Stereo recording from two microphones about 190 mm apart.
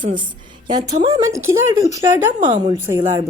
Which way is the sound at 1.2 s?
15° right (ahead or behind).